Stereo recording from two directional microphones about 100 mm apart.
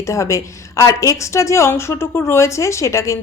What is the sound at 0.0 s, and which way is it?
A woman's voice, 30° left (ahead or behind).